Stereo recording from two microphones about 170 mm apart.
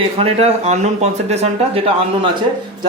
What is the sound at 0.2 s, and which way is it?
Speech, 35° right (ahead or behind).